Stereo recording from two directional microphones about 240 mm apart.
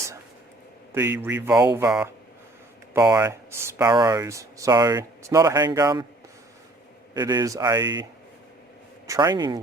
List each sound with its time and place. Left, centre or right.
0.9 s speech: centre
7.1 s speech: centre
9.0 s speech: centre